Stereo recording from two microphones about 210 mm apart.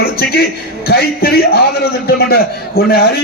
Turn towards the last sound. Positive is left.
turn(degrees=45)  # may be behind; listen again after turning